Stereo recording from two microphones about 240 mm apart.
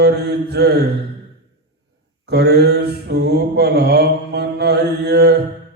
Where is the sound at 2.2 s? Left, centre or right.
Right.